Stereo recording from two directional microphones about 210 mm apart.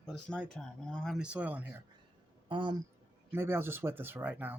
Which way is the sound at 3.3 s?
10° right (ahead or behind).